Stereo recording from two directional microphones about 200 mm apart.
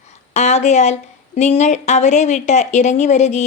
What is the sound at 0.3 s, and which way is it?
Speech, 35° left (ahead or behind).